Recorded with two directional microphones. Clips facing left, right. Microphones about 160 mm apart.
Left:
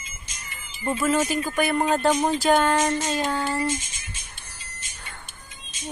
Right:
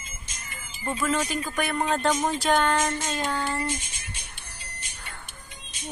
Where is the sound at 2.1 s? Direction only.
20° left (ahead or behind).